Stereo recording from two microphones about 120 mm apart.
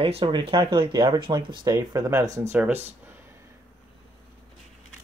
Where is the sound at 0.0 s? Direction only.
55° right (ahead or behind); by 2.6 s 25° right (ahead or behind).